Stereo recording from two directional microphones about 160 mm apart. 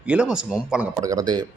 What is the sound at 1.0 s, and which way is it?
Speech, 25° right (ahead or behind).